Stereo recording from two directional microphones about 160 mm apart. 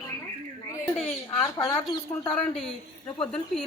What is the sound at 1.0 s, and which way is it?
Bird, 20° left (ahead or behind).